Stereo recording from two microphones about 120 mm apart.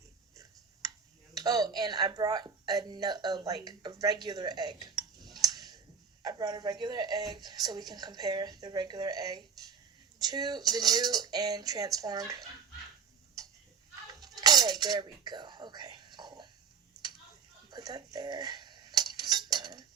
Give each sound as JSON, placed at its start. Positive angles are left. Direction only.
{"t": 1.4, "sound": "a woman's voice", "side_deg": -30}
{"t": 14.2, "sound": "cutlery", "side_deg": -30}
{"t": 17.7, "sound": "cutlery", "side_deg": -35}